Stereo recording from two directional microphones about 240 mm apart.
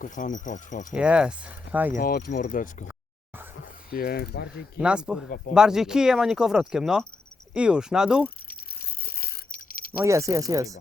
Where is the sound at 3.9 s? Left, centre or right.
Left.